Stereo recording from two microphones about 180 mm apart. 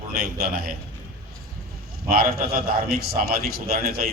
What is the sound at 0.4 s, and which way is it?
Speech, 55° right (ahead or behind).